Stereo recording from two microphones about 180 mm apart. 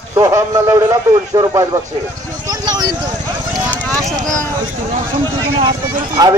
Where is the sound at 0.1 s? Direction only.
15° right (ahead or behind).